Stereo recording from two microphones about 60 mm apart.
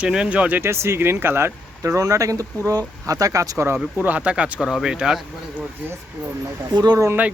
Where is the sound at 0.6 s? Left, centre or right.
Right.